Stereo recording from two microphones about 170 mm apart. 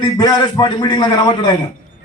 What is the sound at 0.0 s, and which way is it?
A man's voice, 25° left (ahead or behind).